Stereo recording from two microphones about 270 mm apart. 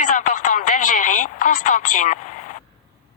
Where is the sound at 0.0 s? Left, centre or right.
Left.